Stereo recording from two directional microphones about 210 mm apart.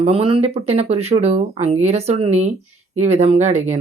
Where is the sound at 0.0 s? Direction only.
25° right (ahead or behind).